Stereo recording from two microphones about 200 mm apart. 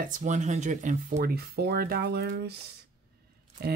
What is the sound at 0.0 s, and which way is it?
Speech, 35° right (ahead or behind).